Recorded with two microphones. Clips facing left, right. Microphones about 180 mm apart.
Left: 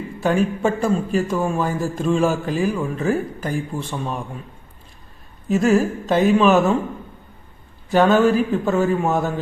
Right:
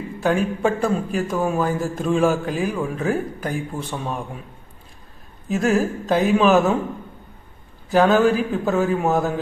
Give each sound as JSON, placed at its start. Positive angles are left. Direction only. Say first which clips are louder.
{"t": 0.2, "sound": "a man's voice", "louder": "left 1 dB", "side_deg": 0}
{"t": 5.5, "sound": "a man's voice", "louder": "left 3 dB", "side_deg": 0}
{"t": 7.9, "sound": "a man's voice", "louder": "left 1 dB", "side_deg": 0}